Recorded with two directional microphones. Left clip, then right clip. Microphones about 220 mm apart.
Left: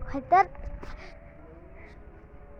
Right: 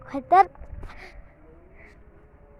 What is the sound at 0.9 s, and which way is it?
Music, 50° right (ahead or behind).